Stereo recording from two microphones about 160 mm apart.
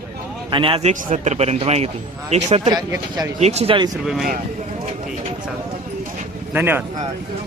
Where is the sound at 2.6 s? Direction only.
25° right (ahead or behind).